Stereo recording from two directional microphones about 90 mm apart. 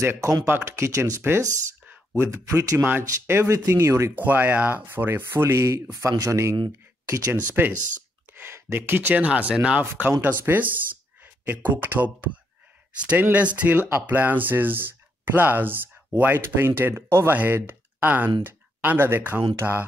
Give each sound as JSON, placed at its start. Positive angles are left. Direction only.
{"t": 0.0, "sound": "speech", "side_deg": -35}
{"t": 4.1, "sound": "speech", "side_deg": -20}
{"t": 9.8, "sound": "speech", "side_deg": -20}
{"t": 19.6, "sound": "mantra", "side_deg": -15}